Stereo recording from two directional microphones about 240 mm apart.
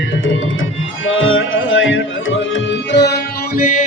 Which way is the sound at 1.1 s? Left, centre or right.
Left.